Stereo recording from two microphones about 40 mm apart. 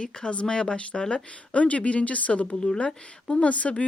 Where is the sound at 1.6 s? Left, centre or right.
Left.